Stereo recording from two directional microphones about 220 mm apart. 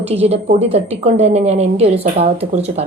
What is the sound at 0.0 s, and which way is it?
A woman's voice, 30° right (ahead or behind).